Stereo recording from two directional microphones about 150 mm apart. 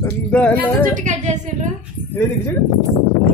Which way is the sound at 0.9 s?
55° right (ahead or behind).